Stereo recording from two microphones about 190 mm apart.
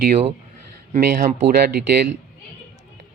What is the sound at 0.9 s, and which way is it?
Speech, 45° right (ahead or behind).